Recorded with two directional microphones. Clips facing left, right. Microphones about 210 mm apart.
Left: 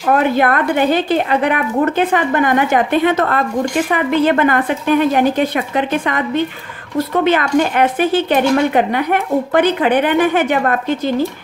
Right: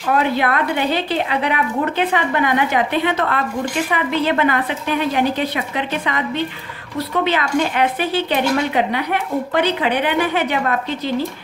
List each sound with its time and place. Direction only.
0.1 s speech: 50° left (ahead or behind)